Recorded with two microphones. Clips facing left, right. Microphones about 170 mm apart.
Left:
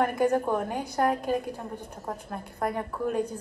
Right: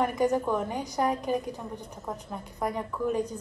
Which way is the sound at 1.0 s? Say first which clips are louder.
Left 2 dB; 55° left (ahead or behind).